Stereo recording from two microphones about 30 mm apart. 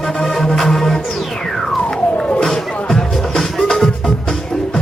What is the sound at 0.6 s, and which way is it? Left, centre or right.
Music, centre.